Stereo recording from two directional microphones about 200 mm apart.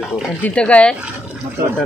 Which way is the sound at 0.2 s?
5° left (ahead or behind).